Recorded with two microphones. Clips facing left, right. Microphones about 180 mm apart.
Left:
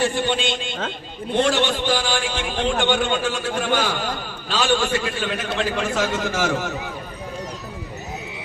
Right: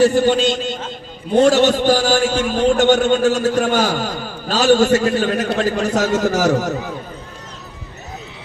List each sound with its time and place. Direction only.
0.0 s a man's voice: 40° right (ahead or behind)